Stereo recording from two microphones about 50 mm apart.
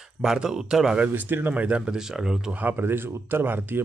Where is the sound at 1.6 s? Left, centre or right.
Centre.